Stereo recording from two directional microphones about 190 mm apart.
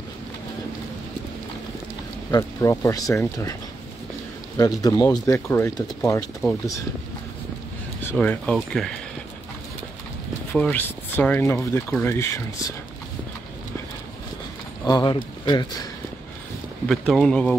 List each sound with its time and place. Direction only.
2.3 s speech: 15° left (ahead or behind)
4.6 s speech: 20° left (ahead or behind)
8.1 s speech: 10° left (ahead or behind)
10.5 s speech: 10° left (ahead or behind)
14.9 s speech: 20° left (ahead or behind)
16.8 s speech: 5° left (ahead or behind)